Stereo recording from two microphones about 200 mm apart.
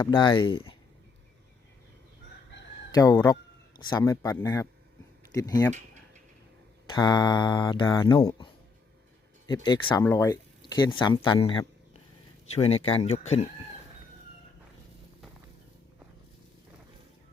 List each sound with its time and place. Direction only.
0.0 s speech: 20° left (ahead or behind)
2.9 s a man's voice: 20° left (ahead or behind)
6.8 s speech: 20° left (ahead or behind)
9.6 s speech: 20° left (ahead or behind)